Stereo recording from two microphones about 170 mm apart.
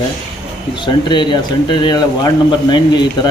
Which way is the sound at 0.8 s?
25° left (ahead or behind).